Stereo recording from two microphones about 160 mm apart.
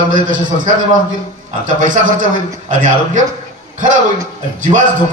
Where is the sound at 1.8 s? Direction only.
55° right (ahead or behind).